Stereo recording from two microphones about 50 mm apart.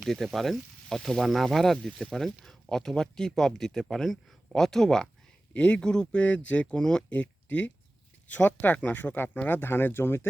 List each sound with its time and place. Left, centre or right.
0.3 s speech: centre
5.5 s speech: left
6.7 s speech: centre
7.1 s speech: left